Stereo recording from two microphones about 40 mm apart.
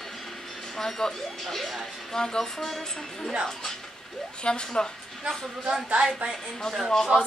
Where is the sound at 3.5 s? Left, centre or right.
Centre.